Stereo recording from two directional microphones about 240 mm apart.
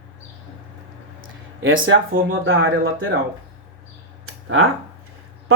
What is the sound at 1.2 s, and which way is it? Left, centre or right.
Speech, right.